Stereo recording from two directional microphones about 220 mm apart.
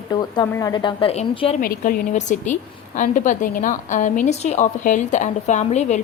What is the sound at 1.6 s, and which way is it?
A woman's voice, 40° left (ahead or behind).